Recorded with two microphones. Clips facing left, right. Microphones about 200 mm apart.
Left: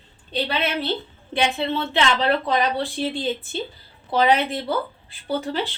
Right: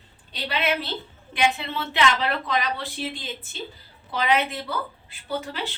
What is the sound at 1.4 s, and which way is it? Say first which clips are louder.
A woman's voice: left 1 dB; 30° left (ahead or behind).